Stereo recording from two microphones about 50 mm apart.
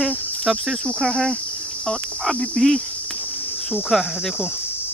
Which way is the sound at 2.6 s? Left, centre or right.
Centre.